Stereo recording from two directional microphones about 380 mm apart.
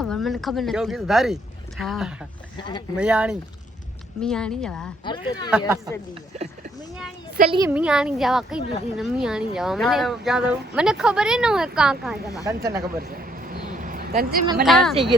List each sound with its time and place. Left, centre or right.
0.0 s speech: centre
2.6 s speech: centre
3.0 s speech: centre
5.0 s speech: centre
5.5 s speech: centre
7.3 s speech: centre
13.0 s a sound: right
14.6 s speech: centre